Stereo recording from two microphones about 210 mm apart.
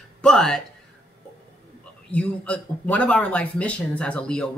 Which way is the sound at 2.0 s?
5° left (ahead or behind).